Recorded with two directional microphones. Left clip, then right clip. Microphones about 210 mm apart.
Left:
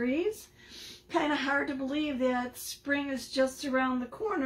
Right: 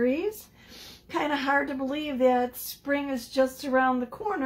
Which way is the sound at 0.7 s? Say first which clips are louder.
Even; 15° right (ahead or behind).